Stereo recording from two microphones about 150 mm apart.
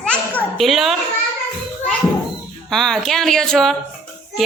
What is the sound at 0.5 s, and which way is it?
Speech, centre (ahead or behind).